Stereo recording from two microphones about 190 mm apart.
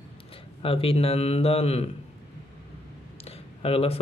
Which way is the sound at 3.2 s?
30° left (ahead or behind).